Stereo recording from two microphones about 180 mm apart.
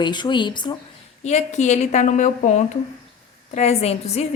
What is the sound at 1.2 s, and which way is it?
A woman's voice, 40° left (ahead or behind).